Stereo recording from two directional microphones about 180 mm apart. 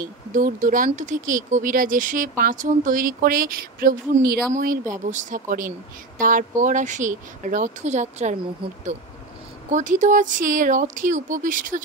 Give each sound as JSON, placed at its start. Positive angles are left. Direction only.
{"t": 0.0, "sound": "speech", "side_deg": -50}
{"t": 9.7, "sound": "speech", "side_deg": -45}